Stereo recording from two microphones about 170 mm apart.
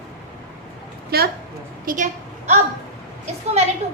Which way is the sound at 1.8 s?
50° right (ahead or behind).